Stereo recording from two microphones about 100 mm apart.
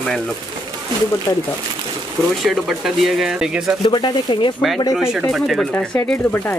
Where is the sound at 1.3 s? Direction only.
35° left (ahead or behind).